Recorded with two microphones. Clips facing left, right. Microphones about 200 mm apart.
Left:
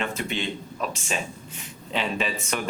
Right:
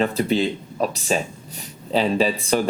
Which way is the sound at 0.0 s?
35° right (ahead or behind).